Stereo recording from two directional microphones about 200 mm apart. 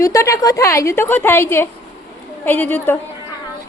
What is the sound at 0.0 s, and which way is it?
A woman's voice, 15° left (ahead or behind).